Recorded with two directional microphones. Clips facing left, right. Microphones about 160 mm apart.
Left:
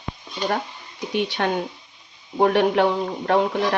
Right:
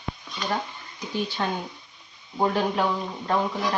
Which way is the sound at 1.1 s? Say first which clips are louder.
Left 5 dB; 70° left (ahead or behind).